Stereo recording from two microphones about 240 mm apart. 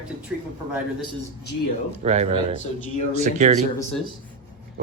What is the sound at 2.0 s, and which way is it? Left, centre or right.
Speech, right.